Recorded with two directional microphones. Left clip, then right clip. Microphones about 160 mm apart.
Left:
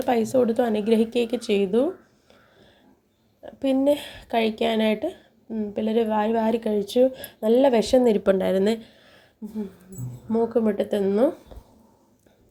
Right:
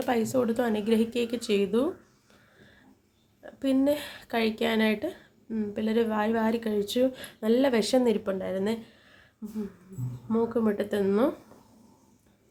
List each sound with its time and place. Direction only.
0.0 s speech: 15° left (ahead or behind)
3.4 s speech: 15° left (ahead or behind)
8.2 s speech: 45° left (ahead or behind); by 9.2 s 25° left (ahead or behind)
10.3 s speech: 20° left (ahead or behind)